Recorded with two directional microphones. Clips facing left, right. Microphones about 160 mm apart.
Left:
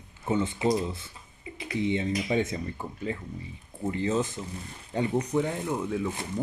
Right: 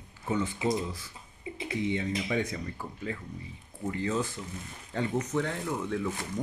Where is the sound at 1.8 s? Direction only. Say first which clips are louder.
Left 4 dB; 25° left (ahead or behind).